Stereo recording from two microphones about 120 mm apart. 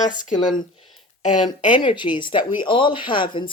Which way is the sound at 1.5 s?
40° left (ahead or behind).